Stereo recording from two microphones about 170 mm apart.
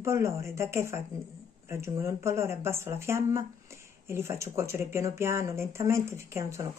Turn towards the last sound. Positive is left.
turn(degrees=-15)  # may be behind; listen again after turning